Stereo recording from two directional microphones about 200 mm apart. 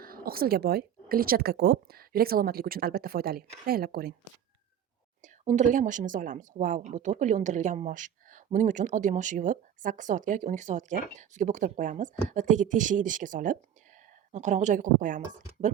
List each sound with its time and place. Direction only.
0.0 s speech: 45° right (ahead or behind)
5.2 s speech: 35° right (ahead or behind)